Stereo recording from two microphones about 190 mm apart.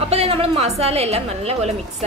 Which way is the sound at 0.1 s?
30° right (ahead or behind).